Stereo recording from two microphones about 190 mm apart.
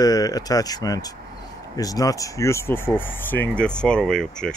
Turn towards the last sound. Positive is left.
turn(degrees=5)  # may be behind; listen again after turning